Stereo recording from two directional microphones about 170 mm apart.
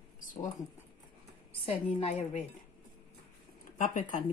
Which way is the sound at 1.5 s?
35° left (ahead or behind).